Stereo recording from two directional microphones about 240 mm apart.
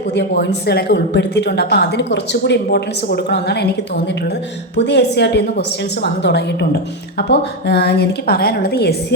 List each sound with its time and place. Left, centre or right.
0.2 s speech: left
4.9 s a woman's voice: left